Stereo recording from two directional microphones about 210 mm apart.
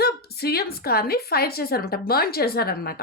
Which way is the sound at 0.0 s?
50° left (ahead or behind).